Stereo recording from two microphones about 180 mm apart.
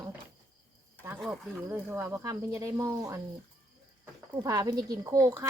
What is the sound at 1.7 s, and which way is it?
Speech, 15° right (ahead or behind).